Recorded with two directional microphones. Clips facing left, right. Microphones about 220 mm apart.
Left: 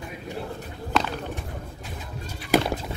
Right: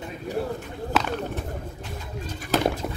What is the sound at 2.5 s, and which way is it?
Horse, 10° left (ahead or behind).